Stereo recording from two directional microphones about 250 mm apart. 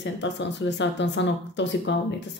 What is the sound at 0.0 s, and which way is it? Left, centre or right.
Speech, left.